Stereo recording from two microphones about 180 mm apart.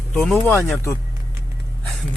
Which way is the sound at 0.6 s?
15° left (ahead or behind).